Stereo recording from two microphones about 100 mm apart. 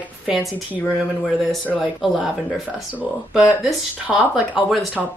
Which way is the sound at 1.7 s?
Centre (ahead or behind).